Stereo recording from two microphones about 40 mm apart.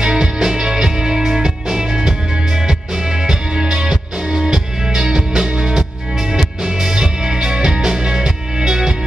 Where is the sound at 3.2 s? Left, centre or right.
Right.